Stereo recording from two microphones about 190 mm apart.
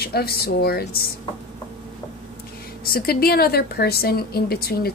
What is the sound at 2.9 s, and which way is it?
A woman's voice, 50° left (ahead or behind).